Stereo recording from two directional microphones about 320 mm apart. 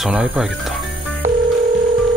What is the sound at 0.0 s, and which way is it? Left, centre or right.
Speech, centre.